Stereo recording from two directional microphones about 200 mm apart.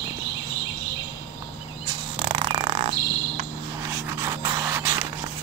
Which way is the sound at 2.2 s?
30° right (ahead or behind).